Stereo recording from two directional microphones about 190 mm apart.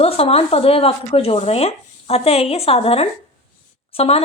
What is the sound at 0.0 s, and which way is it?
Speech, 30° left (ahead or behind).